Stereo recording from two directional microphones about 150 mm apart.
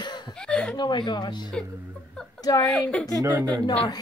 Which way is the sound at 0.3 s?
5° left (ahead or behind).